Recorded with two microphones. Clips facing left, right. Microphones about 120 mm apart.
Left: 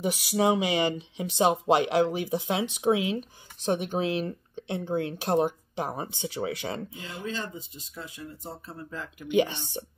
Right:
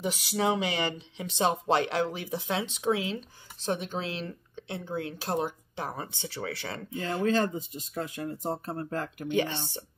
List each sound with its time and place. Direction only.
0.0 s speech: 15° left (ahead or behind)
7.2 s speech: 50° right (ahead or behind)
9.3 s speech: 15° left (ahead or behind)